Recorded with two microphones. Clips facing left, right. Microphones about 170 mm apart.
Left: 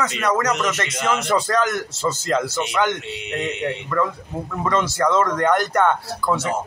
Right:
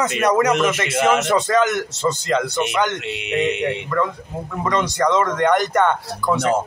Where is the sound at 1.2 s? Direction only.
Centre (ahead or behind).